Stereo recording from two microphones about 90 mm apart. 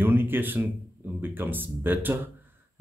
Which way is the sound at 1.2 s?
25° right (ahead or behind).